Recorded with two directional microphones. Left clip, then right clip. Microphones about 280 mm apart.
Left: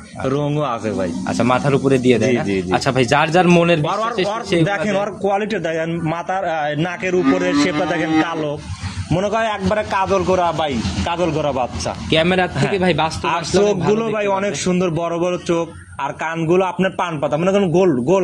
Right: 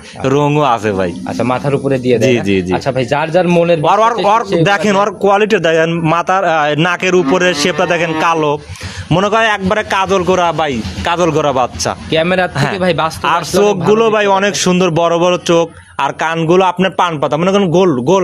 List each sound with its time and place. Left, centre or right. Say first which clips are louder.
0.2 s a man's voice: right 8 dB; right
1.4 s speech: right 2 dB; centre
3.8 s a man's voice: right 9 dB; right
12.1 s a man's voice: right 3 dB; centre; by 18.2 s right